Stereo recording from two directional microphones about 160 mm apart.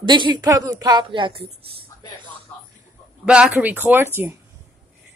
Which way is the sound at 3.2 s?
5° right (ahead or behind).